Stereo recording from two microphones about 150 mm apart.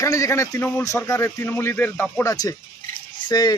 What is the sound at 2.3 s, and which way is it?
Speech, 25° left (ahead or behind).